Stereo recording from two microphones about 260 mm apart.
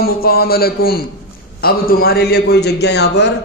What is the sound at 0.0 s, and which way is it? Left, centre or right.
Speech, left.